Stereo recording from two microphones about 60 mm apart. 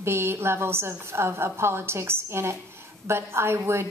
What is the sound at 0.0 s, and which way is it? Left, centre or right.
A woman's voice, right.